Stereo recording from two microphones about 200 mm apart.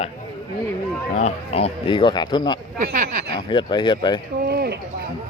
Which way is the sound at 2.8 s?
45° right (ahead or behind).